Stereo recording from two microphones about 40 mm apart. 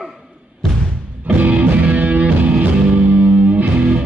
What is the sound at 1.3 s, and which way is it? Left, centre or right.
Music, right.